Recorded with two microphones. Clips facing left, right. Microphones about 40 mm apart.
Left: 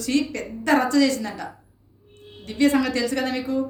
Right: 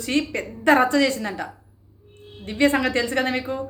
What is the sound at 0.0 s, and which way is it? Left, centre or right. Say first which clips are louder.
A woman's voice: even; right.